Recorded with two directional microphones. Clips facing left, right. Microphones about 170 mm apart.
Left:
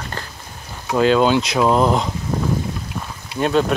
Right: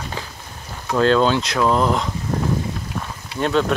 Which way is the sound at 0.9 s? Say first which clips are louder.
Left 1 dB; 10° left (ahead or behind).